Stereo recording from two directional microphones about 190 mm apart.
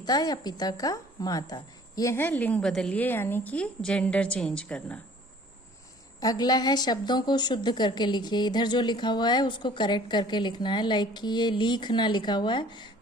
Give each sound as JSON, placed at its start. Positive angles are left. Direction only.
{"t": 0.0, "sound": "a woman's voice", "side_deg": 20}
{"t": 6.1, "sound": "a woman's voice", "side_deg": 20}